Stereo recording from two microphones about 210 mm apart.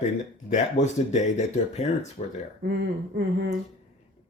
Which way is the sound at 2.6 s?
50° right (ahead or behind).